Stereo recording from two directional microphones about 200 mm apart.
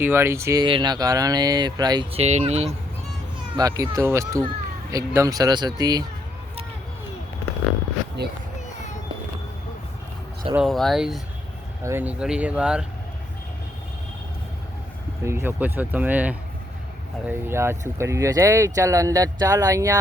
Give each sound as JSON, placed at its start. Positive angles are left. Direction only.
{"t": 0.0, "sound": "speech", "side_deg": -10}
{"t": 2.2, "sound": "speech", "side_deg": -35}
{"t": 3.5, "sound": "speech", "side_deg": -20}
{"t": 8.2, "sound": "speech", "side_deg": -55}
{"t": 10.5, "sound": "speech", "side_deg": 0}
{"t": 11.8, "sound": "speech", "side_deg": -10}
{"t": 15.2, "sound": "speech", "side_deg": -15}